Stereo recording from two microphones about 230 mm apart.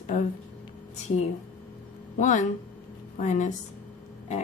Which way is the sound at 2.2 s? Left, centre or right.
Left.